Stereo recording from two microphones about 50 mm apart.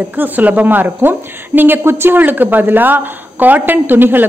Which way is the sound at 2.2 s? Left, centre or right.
Right.